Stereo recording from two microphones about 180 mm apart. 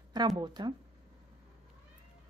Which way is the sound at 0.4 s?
25° right (ahead or behind).